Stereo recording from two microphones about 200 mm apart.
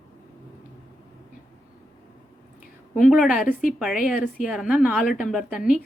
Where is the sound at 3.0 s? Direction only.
5° right (ahead or behind).